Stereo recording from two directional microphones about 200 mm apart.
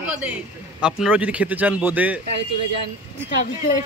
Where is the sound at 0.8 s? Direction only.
5° right (ahead or behind).